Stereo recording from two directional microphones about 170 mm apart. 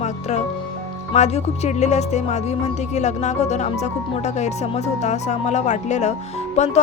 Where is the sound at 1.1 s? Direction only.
40° left (ahead or behind).